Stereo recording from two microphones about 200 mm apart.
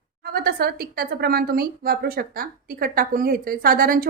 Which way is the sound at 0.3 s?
50° right (ahead or behind).